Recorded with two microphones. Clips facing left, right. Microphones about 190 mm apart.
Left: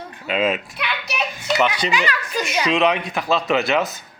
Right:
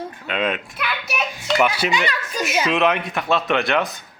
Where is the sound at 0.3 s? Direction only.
5° left (ahead or behind).